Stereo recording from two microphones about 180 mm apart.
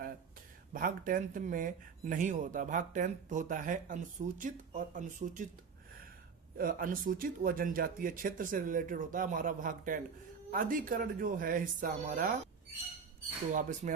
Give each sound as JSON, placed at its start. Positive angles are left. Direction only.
{"t": 0.7, "sound": "speech", "side_deg": -50}
{"t": 6.6, "sound": "speech", "side_deg": -50}
{"t": 13.5, "sound": "speech", "side_deg": -45}